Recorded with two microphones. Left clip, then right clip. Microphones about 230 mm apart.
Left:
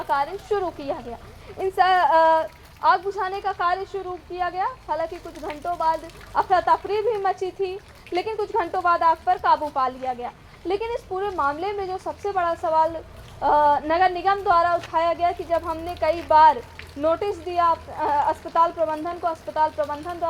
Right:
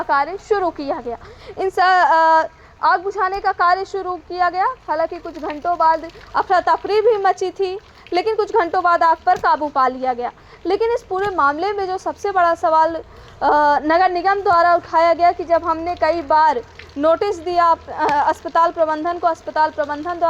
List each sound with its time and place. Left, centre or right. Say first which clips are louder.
0.1 s speech: right 5 dB; right